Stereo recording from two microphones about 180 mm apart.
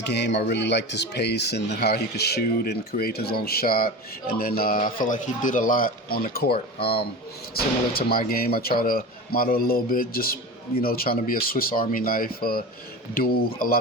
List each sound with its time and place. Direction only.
0.0 s speech: 70° left (ahead or behind); by 13.7 s 55° left (ahead or behind)